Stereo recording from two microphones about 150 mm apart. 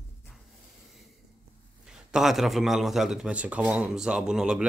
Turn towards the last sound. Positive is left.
turn(degrees=-5)  # may be behind; listen again after turning